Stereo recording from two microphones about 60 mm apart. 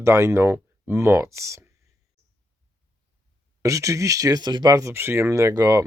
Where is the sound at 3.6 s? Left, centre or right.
Right.